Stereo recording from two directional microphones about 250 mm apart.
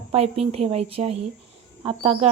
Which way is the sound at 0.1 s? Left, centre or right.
Right.